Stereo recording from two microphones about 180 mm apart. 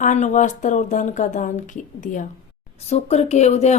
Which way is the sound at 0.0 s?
45° left (ahead or behind).